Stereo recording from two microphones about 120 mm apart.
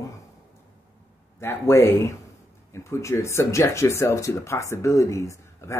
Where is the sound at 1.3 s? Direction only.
20° left (ahead or behind).